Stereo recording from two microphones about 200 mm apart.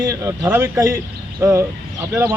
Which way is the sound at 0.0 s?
15° right (ahead or behind).